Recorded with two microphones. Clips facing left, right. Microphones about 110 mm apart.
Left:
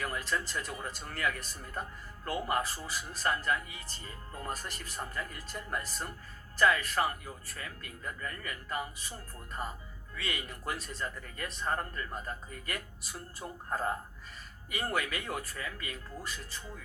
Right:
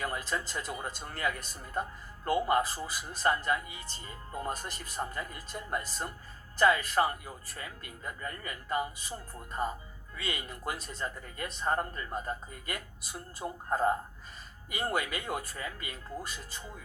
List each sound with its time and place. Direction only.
0.0 s speech: 25° right (ahead or behind)